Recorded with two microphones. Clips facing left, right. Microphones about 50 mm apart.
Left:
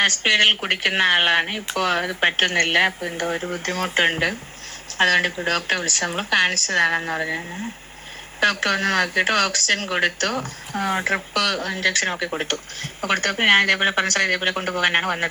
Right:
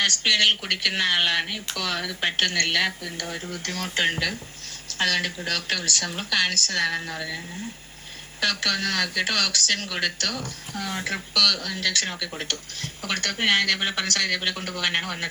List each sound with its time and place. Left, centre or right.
0.0 s speech: left